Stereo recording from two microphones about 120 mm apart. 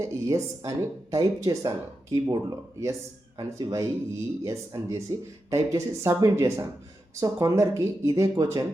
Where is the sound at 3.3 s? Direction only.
30° right (ahead or behind).